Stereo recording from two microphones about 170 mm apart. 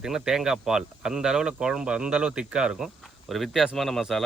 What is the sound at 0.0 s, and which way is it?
Speech, 5° right (ahead or behind).